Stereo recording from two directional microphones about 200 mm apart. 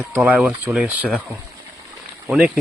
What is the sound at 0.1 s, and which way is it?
Speech, 5° right (ahead or behind).